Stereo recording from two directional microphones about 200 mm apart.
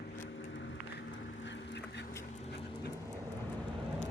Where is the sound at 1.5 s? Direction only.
60° left (ahead or behind).